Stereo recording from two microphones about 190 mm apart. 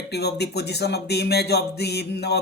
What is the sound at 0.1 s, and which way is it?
Speech, 60° left (ahead or behind).